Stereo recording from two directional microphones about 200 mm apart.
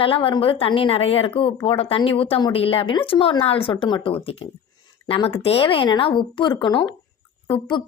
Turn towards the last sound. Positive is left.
turn(degrees=25)  # may be behind; listen again after turning